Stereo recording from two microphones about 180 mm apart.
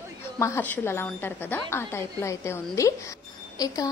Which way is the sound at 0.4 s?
15° left (ahead or behind).